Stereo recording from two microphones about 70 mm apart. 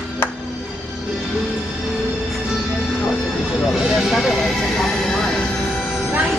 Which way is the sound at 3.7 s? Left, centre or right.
Centre.